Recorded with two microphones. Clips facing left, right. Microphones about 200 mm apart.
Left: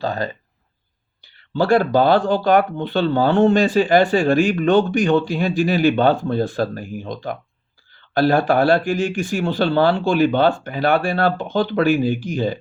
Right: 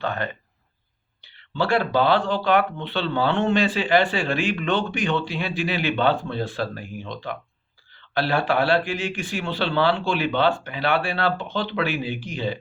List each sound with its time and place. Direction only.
0.0 s speech: 35° left (ahead or behind)